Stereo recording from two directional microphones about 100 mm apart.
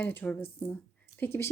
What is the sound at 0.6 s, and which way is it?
Speech, 30° left (ahead or behind).